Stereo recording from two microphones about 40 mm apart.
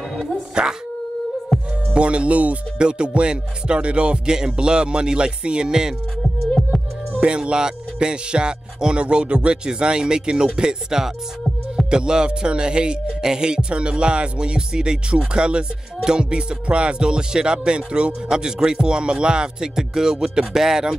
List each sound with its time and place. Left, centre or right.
0.1 s music: centre
1.5 s music: centre
2.0 s speech: right
2.8 s speech: right
7.2 s speech: right; by 20.9 s centre